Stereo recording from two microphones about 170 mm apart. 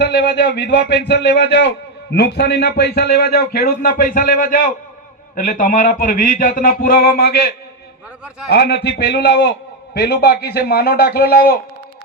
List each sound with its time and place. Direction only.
0.0 s a man's voice: 75° left (ahead or behind)
8.4 s a man's voice: 75° left (ahead or behind)